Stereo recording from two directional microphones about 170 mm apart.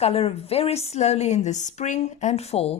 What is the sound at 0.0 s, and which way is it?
A woman's voice, 35° left (ahead or behind).